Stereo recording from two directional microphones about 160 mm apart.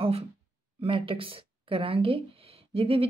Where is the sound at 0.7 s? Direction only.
35° right (ahead or behind).